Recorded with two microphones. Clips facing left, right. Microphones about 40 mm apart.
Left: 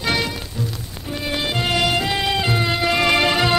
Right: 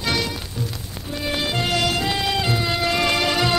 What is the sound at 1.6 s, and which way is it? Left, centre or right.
Music, centre.